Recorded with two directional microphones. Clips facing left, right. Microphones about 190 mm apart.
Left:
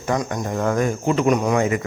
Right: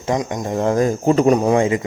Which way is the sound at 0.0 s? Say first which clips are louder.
Right 2 dB; 20° right (ahead or behind).